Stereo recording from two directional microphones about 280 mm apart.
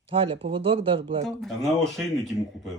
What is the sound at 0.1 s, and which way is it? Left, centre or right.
Speech, centre.